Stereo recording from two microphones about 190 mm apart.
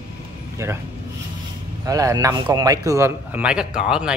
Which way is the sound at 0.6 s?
15° right (ahead or behind).